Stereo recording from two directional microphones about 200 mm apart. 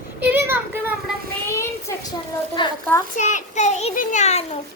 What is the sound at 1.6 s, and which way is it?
A child's voice, 15° left (ahead or behind).